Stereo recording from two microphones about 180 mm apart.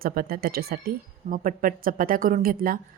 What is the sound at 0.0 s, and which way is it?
A woman's voice, 55° right (ahead or behind).